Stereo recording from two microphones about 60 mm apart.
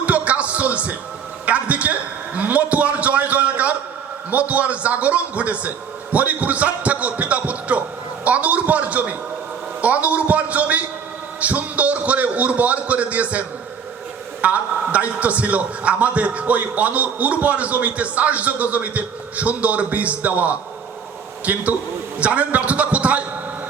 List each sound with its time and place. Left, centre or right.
0.0 s music: right
1.5 s a man's voice: right
14.4 s a man's voice: right